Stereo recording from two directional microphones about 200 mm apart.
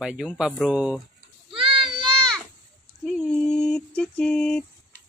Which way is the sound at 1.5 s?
25° right (ahead or behind).